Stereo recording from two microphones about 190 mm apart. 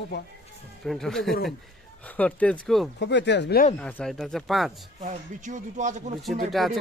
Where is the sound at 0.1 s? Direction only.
65° left (ahead or behind).